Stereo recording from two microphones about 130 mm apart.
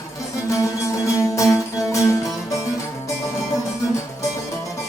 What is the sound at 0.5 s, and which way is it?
Music, 25° left (ahead or behind).